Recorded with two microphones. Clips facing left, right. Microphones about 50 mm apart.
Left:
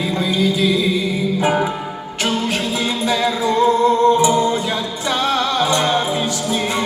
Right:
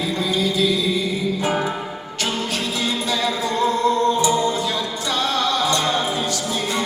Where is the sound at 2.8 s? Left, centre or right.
Left.